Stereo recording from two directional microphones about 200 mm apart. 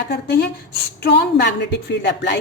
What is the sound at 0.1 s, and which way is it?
A woman's voice, 55° left (ahead or behind).